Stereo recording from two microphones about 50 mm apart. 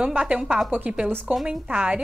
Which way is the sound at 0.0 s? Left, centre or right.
Right.